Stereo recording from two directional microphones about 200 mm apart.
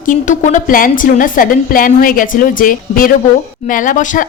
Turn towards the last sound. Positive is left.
turn(degrees=40)  # may be behind; listen again after turning